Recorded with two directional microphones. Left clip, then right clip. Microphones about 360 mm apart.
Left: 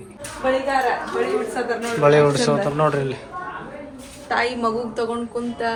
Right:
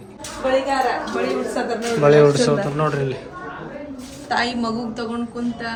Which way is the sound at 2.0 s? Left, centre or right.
Centre.